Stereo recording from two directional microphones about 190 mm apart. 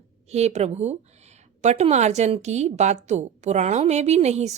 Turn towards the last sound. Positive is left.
turn(degrees=-35)  # may be behind; listen again after turning